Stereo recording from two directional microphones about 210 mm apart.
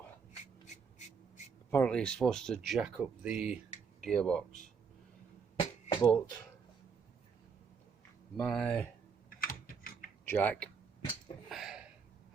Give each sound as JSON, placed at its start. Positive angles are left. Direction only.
{"t": 1.7, "sound": "speech", "side_deg": 5}
{"t": 5.5, "sound": "a sound", "side_deg": 25}
{"t": 8.4, "sound": "speech", "side_deg": 5}
{"t": 9.4, "sound": "typing", "side_deg": 45}
{"t": 10.2, "sound": "speech", "side_deg": 10}
{"t": 11.4, "sound": "a sound", "side_deg": 0}